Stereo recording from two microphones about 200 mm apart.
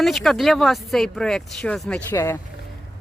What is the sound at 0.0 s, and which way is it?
Speech, centre (ahead or behind).